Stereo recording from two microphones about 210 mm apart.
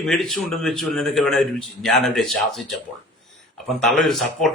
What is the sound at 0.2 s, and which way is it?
A man's voice, centre (ahead or behind).